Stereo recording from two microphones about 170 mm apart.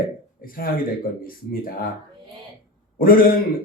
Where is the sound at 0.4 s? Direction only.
60° left (ahead or behind).